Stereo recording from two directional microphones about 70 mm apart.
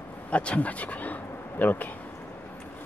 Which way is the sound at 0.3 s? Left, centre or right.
Centre.